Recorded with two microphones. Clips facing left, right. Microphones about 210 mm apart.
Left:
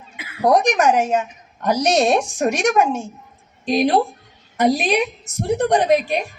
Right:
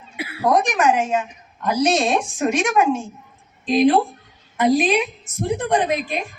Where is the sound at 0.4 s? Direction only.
40° left (ahead or behind).